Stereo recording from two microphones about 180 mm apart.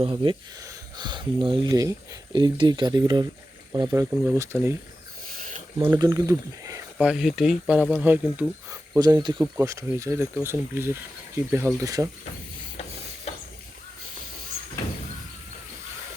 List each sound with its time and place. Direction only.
0.0 s speech: 30° right (ahead or behind)
6.0 s speech: 20° right (ahead or behind)
7.0 s speech: 5° right (ahead or behind)
9.0 s speech: 20° right (ahead or behind)
13.3 s a sound: 35° left (ahead or behind)